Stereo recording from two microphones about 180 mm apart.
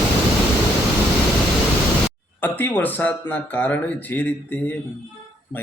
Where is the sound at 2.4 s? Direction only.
10° left (ahead or behind).